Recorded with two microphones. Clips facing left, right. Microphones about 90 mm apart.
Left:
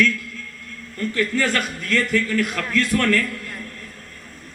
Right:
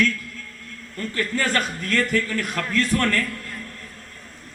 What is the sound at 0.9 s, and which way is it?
A man's voice, 40° right (ahead or behind).